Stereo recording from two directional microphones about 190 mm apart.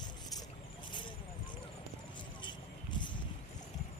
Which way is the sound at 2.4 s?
25° left (ahead or behind).